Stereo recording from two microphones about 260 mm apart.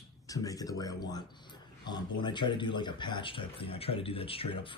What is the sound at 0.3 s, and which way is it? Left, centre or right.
A man's voice, centre.